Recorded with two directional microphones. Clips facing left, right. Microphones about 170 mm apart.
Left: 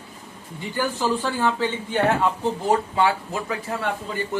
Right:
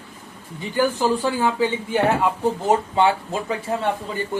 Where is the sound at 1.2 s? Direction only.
10° right (ahead or behind).